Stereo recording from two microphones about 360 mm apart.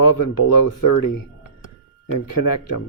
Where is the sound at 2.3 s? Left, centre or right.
Left.